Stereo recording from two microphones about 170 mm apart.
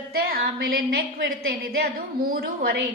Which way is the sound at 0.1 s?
60° right (ahead or behind).